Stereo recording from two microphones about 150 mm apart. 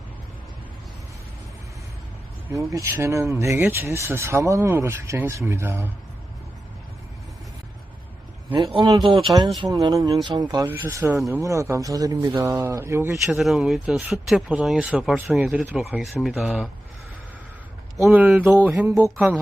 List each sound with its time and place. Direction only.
2.5 s speech: 20° right (ahead or behind)
8.5 s speech: 30° right (ahead or behind)
10.7 s speech: 15° right (ahead or behind)
13.2 s speech: centre (ahead or behind)
18.1 s speech: 10° right (ahead or behind)